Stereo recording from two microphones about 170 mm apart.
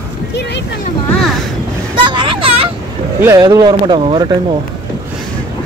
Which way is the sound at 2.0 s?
30° right (ahead or behind).